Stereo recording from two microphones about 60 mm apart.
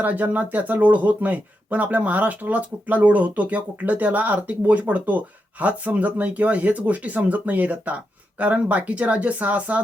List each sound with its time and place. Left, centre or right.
0.0 s speech: right